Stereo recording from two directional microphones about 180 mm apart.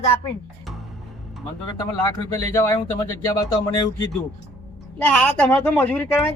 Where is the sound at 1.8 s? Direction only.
20° left (ahead or behind).